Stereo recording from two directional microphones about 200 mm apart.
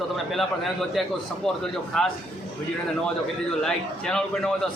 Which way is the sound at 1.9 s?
Centre (ahead or behind).